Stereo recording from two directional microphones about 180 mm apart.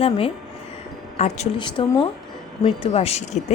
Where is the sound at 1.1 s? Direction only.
40° left (ahead or behind).